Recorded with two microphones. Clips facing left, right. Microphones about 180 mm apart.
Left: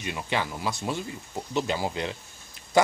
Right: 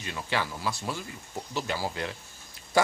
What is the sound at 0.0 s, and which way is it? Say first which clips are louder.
Speech: left 2 dB; 20° left (ahead or behind).